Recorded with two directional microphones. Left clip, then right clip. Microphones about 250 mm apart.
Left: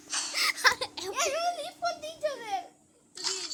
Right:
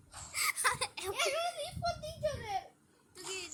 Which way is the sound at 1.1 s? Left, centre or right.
Left.